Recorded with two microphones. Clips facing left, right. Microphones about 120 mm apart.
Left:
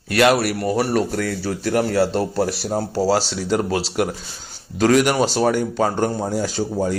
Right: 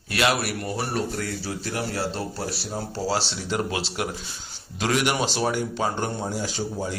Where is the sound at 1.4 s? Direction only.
60° left (ahead or behind).